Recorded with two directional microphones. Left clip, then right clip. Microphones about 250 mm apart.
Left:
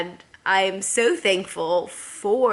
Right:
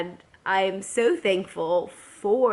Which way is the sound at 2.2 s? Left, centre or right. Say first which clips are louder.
Left 1 dB; right.